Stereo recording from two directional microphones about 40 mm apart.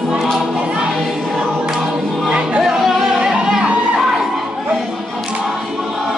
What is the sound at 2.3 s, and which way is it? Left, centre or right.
Music, right.